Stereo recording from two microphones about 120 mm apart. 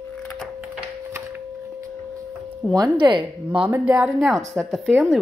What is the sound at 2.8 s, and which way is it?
Speech, 40° right (ahead or behind).